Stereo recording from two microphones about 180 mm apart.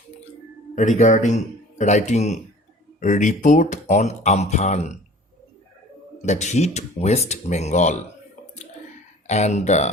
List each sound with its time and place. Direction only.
0.8 s speech: 40° left (ahead or behind)
6.2 s speech: 40° left (ahead or behind)
9.2 s speech: 40° left (ahead or behind)